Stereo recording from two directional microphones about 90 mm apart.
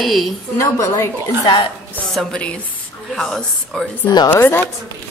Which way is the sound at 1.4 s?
65° left (ahead or behind).